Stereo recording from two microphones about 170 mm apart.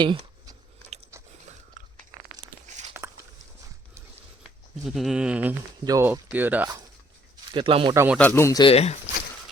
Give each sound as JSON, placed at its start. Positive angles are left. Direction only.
{"t": 0.0, "sound": "a sound", "side_deg": -25}
{"t": 1.1, "sound": "biting", "side_deg": -15}
{"t": 1.8, "sound": "crunch", "side_deg": -50}
{"t": 2.7, "sound": "walk", "side_deg": -45}
{"t": 4.4, "sound": "speech", "side_deg": 0}
{"t": 5.8, "sound": "speech", "side_deg": -20}
{"t": 7.5, "sound": "speech", "side_deg": -30}
{"t": 7.9, "sound": "speech", "side_deg": -10}
{"t": 8.2, "sound": "speech", "side_deg": 15}
{"t": 8.6, "sound": "speech", "side_deg": 35}